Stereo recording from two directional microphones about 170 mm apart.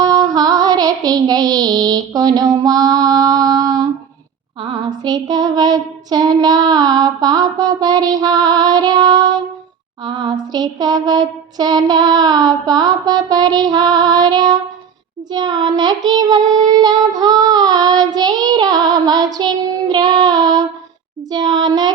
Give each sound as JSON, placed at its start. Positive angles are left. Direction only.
{"t": 0.0, "sound": "female singing", "side_deg": -20}
{"t": 5.0, "sound": "child singing", "side_deg": -25}
{"t": 10.0, "sound": "female singing", "side_deg": -25}
{"t": 10.5, "sound": "child singing", "side_deg": -25}